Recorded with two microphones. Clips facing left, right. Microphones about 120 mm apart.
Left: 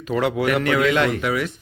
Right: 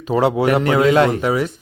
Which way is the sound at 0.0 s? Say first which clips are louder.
Right 5 dB; 35° right (ahead or behind).